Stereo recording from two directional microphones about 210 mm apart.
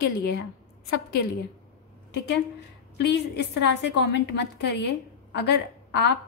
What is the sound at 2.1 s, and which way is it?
A woman's voice, 55° left (ahead or behind).